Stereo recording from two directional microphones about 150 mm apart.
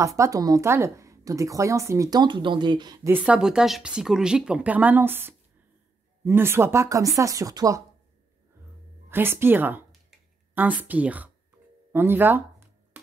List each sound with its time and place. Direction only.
0.0 s a woman's voice: 20° right (ahead or behind)
3.1 s a woman's voice: 10° right (ahead or behind)
9.1 s a woman's voice: 15° right (ahead or behind)
11.9 s a sound: 15° right (ahead or behind)